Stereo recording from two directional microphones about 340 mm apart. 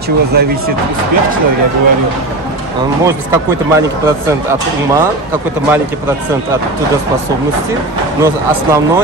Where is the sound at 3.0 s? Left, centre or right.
Centre.